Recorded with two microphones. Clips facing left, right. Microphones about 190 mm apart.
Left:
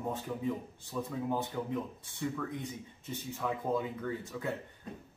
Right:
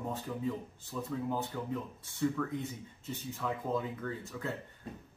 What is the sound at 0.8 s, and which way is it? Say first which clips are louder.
Speech: left 1 dB; 15° left (ahead or behind).